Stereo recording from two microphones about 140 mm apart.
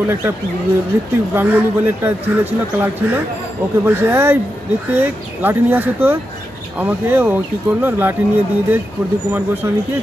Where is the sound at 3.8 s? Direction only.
15° right (ahead or behind).